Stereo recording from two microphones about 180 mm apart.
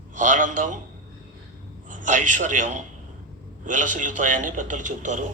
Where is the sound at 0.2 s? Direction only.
45° right (ahead or behind).